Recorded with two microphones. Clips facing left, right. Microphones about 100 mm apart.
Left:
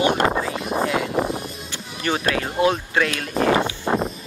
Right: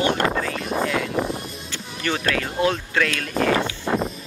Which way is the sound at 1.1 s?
5° left (ahead or behind).